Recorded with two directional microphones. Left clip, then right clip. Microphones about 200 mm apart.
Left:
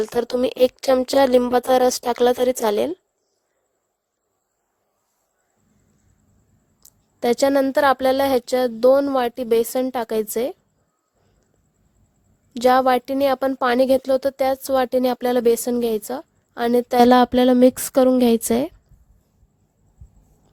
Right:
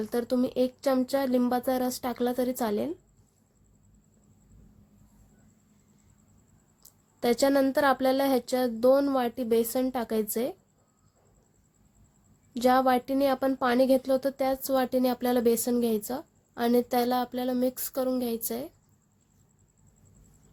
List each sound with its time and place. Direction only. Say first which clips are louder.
0.0 s speech: left 8 dB; 40° left (ahead or behind)
6.8 s speech: left 7 dB; 35° left (ahead or behind)
12.5 s speech: left 7 dB; 45° left (ahead or behind)